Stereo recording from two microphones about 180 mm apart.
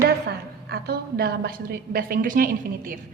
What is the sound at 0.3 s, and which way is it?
A woman's voice, 65° right (ahead or behind).